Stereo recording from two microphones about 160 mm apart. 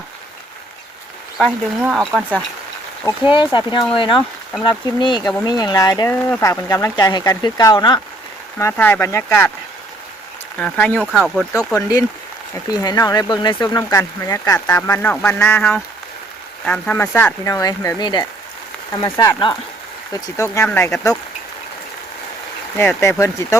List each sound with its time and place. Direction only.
1.4 s speech: 5° right (ahead or behind)
3.2 s speech: 30° left (ahead or behind)
8.5 s speech: 15° left (ahead or behind)
10.6 s speech: 10° left (ahead or behind)
11.5 s speech: 20° left (ahead or behind)
19.1 s speech: 15° left (ahead or behind)
22.8 s speech: 15° left (ahead or behind)